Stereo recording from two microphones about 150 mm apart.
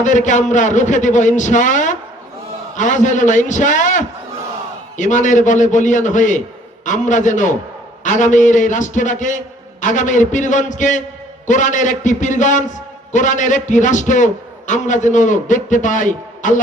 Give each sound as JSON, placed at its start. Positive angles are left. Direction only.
{"t": 0.0, "sound": "a man's voice", "side_deg": 55}